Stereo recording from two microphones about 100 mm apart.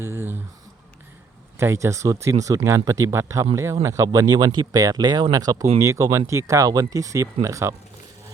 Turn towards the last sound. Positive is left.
turn(degrees=-30)  # may be behind; listen again after turning